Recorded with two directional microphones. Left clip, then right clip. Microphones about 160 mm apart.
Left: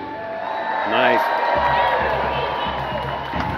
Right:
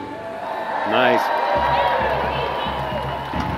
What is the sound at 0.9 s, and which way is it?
Speech, 20° right (ahead or behind).